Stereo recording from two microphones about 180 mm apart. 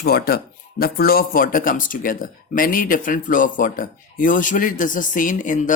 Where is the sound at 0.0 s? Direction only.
60° left (ahead or behind).